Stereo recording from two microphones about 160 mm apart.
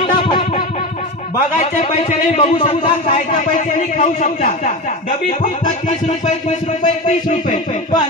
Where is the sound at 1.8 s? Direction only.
40° left (ahead or behind).